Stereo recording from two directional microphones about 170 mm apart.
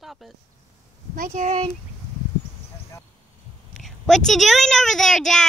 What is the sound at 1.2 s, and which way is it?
Speech, 45° right (ahead or behind).